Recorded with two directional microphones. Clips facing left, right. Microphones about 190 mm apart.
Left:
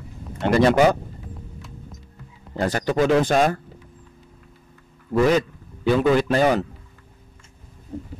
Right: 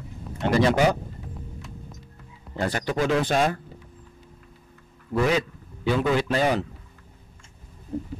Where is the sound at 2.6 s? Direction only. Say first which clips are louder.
Left 4 dB; 40° left (ahead or behind).